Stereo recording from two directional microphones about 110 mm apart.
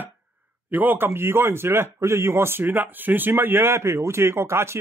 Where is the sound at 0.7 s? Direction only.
15° right (ahead or behind).